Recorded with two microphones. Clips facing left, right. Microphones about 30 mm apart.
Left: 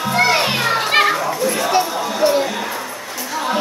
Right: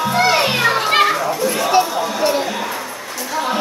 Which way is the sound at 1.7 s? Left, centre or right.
Centre.